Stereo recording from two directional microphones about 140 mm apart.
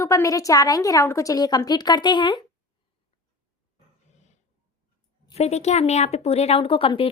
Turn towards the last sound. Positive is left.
turn(degrees=40)  # may be behind; listen again after turning